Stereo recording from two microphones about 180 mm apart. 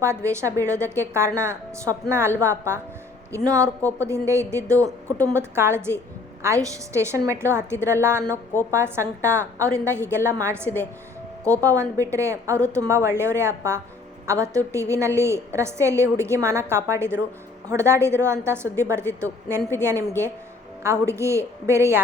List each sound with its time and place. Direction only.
0.0 s a woman's voice: 15° right (ahead or behind)